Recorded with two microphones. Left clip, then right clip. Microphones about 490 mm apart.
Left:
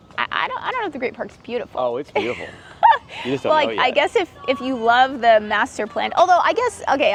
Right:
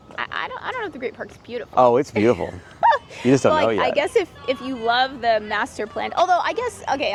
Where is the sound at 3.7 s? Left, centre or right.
Centre.